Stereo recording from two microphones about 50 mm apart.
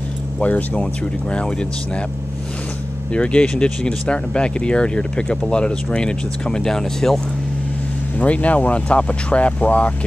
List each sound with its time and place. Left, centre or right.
0.4 s speech: left
1.3 s speech: left
3.1 s speech: left
8.2 s speech: left